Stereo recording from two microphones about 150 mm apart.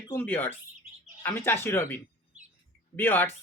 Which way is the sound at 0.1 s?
15° left (ahead or behind).